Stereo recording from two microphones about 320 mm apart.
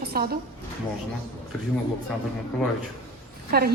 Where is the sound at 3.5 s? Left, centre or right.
Right.